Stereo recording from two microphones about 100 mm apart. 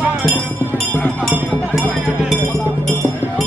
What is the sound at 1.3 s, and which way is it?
Music, 15° right (ahead or behind).